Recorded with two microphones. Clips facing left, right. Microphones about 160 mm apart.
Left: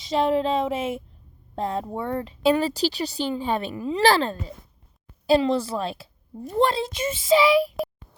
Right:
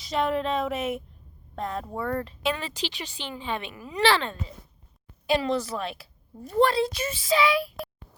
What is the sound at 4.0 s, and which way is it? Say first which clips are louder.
A woman's voice: left 3 dB; 40° left (ahead or behind).